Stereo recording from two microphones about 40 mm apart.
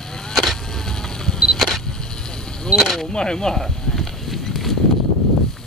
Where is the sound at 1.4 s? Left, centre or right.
Centre.